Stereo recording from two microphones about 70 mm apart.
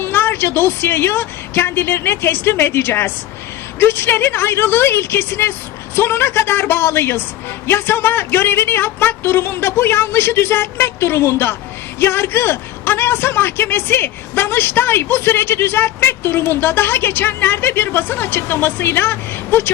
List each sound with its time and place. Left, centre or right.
0.0 s a man's voice: left